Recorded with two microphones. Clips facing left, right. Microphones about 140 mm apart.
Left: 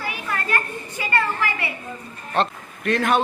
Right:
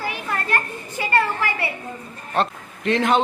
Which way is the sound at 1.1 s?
35° right (ahead or behind).